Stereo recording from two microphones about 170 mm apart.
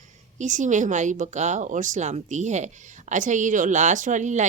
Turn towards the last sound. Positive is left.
turn(degrees=-45)  # may be behind; listen again after turning